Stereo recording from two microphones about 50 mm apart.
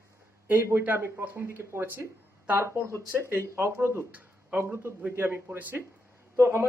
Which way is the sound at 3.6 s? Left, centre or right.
Right.